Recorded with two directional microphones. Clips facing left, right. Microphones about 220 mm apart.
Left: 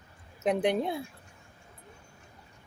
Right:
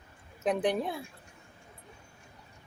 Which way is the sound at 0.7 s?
20° left (ahead or behind).